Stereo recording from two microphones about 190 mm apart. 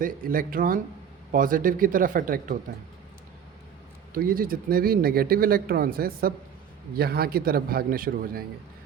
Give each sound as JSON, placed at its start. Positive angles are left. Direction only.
{"t": 0.0, "sound": "speech", "side_deg": -50}
{"t": 4.1, "sound": "speech", "side_deg": -50}